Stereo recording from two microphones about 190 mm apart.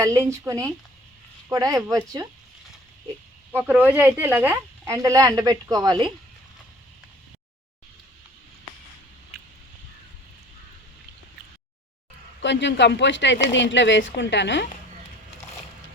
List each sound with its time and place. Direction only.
0.0 s speech: 15° right (ahead or behind)
3.5 s speech: 10° right (ahead or behind)
12.4 s speech: 65° left (ahead or behind)